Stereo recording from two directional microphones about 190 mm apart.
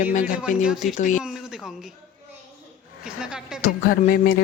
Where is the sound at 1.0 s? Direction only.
40° left (ahead or behind).